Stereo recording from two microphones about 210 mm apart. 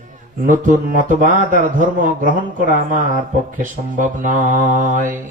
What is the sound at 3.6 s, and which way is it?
Speech, 40° right (ahead or behind).